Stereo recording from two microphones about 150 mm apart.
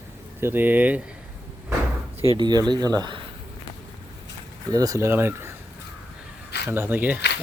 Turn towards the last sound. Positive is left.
turn(degrees=-10)  # may be behind; listen again after turning